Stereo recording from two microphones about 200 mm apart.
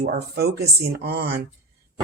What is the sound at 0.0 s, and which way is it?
Speech, 55° right (ahead or behind).